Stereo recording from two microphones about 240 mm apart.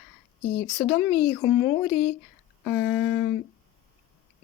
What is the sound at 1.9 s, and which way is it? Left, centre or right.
Speech, left.